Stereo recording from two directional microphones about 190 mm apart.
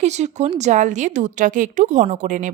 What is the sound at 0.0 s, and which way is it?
A woman's voice, 35° right (ahead or behind).